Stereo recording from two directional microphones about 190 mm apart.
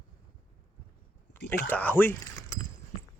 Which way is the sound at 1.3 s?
65° left (ahead or behind).